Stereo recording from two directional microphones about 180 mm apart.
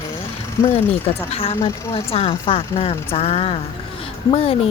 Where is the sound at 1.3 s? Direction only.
35° left (ahead or behind).